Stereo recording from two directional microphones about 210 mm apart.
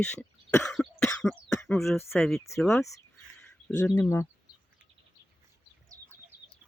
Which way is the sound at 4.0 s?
15° left (ahead or behind).